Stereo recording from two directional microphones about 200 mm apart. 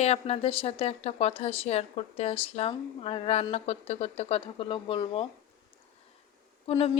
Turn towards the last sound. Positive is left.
turn(degrees=30)  # may be behind; listen again after turning